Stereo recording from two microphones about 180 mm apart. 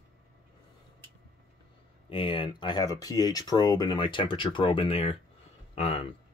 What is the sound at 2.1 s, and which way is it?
Speech, 30° left (ahead or behind).